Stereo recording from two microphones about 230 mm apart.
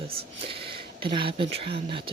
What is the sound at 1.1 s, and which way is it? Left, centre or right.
Speech, right.